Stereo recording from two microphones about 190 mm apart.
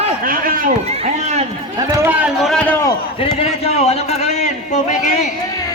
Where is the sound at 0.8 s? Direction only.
35° right (ahead or behind).